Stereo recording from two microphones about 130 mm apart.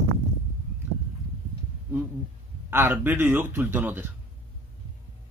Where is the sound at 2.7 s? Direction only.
15° right (ahead or behind).